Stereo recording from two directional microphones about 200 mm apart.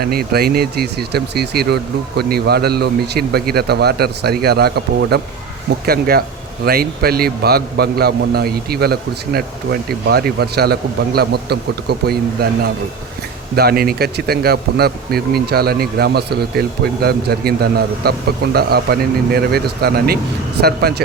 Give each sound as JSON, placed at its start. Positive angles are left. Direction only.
{"t": 0.0, "sound": "speech", "side_deg": -50}